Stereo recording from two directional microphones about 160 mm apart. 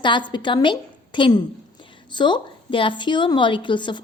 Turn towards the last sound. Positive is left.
turn(degrees=30)  # may be behind; listen again after turning